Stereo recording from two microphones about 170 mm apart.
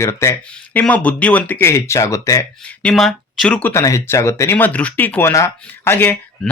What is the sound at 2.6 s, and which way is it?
Speech, 5° left (ahead or behind).